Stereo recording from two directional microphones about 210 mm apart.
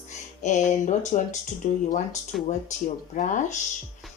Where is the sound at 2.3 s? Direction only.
Centre (ahead or behind).